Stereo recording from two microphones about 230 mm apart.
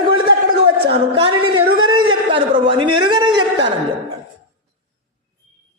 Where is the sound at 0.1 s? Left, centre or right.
Centre.